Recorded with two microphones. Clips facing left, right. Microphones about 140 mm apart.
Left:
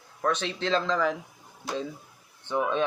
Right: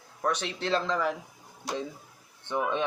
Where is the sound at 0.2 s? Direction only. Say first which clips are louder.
Left 2 dB; 15° right (ahead or behind).